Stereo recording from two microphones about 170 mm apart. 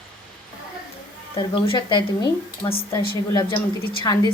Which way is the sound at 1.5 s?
30° left (ahead or behind).